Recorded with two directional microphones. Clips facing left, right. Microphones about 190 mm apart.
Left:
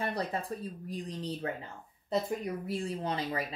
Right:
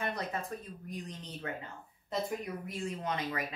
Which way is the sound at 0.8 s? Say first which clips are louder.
Left 6 dB; 35° left (ahead or behind).